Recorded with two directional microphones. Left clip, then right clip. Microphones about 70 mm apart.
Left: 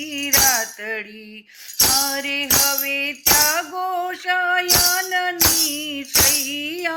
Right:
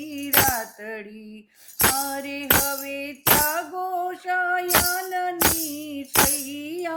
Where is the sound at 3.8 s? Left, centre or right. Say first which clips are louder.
Left 4 dB; right.